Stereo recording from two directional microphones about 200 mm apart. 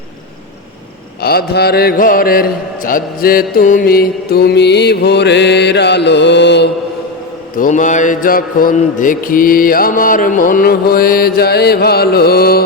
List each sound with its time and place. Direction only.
1.2 s speech: 50° left (ahead or behind)
7.5 s speech: 40° left (ahead or behind)